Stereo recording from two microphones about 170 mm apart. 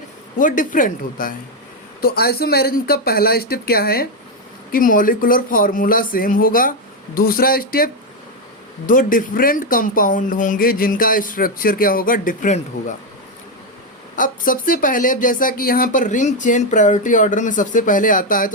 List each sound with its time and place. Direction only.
0.3 s speech: 50° left (ahead or behind)
2.0 s speech: 65° left (ahead or behind)
4.7 s speech: 55° left (ahead or behind)
8.9 s speech: 50° left (ahead or behind)
14.2 s speech: 55° left (ahead or behind)